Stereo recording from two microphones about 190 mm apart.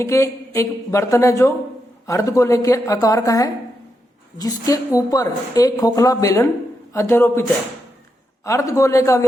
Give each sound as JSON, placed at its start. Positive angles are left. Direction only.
{"t": 0.0, "sound": "a woman's voice", "side_deg": 15}
{"t": 8.4, "sound": "a woman's voice", "side_deg": 15}